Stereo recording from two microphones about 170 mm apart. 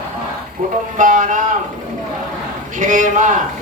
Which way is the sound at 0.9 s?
50° right (ahead or behind).